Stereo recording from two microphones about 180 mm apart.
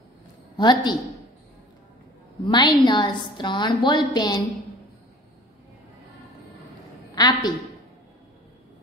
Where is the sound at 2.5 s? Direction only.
25° left (ahead or behind).